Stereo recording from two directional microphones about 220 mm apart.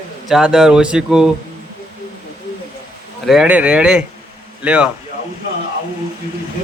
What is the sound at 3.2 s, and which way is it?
Speech, 5° right (ahead or behind).